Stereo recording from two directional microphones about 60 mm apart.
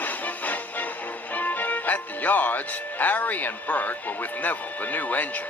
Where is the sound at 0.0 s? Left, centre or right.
Left.